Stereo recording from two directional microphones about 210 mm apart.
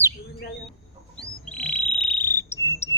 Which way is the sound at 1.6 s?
5° left (ahead or behind).